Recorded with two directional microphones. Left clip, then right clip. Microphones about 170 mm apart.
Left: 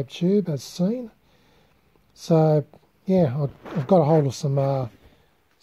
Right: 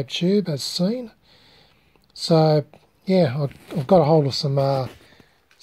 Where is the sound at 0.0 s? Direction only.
5° left (ahead or behind).